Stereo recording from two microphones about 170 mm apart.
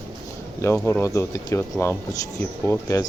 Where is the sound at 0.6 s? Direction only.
15° left (ahead or behind).